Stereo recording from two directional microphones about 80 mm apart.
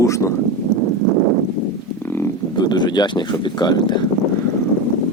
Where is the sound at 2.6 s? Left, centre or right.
Left.